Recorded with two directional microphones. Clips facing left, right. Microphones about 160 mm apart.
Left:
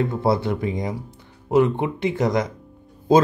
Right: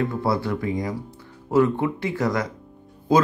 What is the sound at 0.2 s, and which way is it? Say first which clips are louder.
Speech: left 3 dB; 20° left (ahead or behind).